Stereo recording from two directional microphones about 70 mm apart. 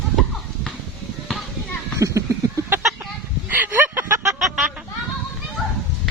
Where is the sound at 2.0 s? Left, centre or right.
Right.